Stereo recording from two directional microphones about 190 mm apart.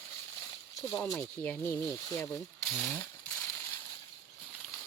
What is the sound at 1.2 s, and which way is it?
Speech, 10° left (ahead or behind).